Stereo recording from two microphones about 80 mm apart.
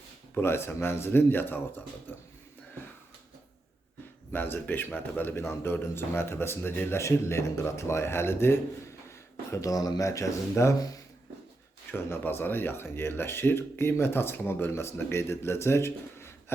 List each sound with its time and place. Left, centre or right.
0.3 s speech: left
4.3 s a man's voice: left
9.0 s speech: left
11.9 s speech: left